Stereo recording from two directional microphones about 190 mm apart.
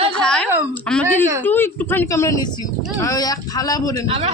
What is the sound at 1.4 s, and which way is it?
Speech, 10° left (ahead or behind).